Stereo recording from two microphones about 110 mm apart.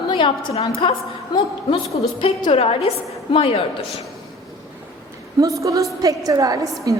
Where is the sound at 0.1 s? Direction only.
45° left (ahead or behind).